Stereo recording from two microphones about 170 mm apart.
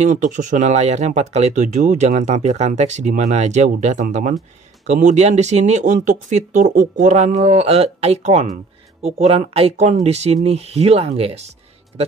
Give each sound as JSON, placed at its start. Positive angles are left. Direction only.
{"t": 0.0, "sound": "speech", "side_deg": -50}